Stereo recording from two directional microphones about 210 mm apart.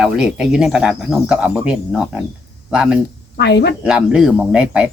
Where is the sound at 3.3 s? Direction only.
55° left (ahead or behind).